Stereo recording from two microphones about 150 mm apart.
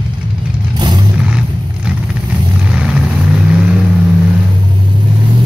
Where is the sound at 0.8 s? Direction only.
30° right (ahead or behind).